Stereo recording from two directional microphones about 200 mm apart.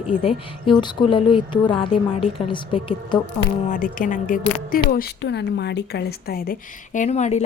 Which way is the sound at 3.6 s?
40° left (ahead or behind).